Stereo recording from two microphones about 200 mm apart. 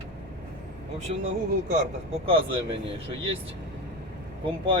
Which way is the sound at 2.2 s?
25° right (ahead or behind).